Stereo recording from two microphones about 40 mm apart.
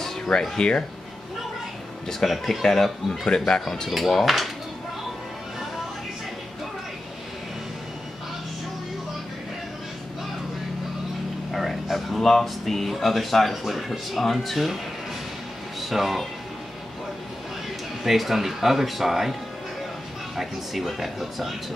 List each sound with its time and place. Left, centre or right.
0.0 s speech: centre
2.0 s speech: centre
3.1 s speech: centre
3.9 s speech: centre
11.5 s a sound: centre
12.2 s speech: centre
15.8 s speech: centre
18.0 s speech: centre
20.3 s speech: centre